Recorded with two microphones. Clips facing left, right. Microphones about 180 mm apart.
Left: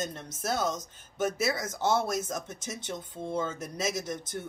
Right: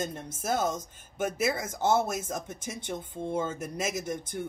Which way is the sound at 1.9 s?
10° right (ahead or behind).